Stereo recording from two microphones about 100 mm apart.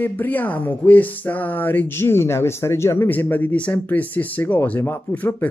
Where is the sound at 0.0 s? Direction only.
15° left (ahead or behind).